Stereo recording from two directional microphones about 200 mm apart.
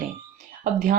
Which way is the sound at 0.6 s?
45° right (ahead or behind).